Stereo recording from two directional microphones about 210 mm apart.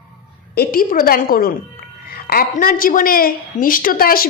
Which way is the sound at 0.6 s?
45° left (ahead or behind).